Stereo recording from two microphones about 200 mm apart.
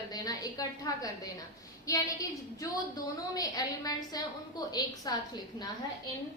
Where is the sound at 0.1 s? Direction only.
20° left (ahead or behind).